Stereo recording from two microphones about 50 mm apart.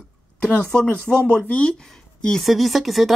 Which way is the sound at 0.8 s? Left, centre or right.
Left.